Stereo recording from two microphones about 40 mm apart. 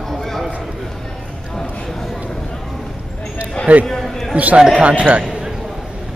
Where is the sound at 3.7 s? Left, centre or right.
Right.